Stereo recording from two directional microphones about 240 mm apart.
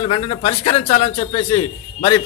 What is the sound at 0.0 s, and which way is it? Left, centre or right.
A man's voice, left.